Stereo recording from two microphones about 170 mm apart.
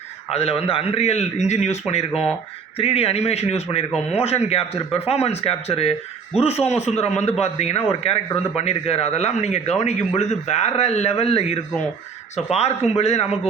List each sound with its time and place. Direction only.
0.3 s a man's voice: 35° left (ahead or behind)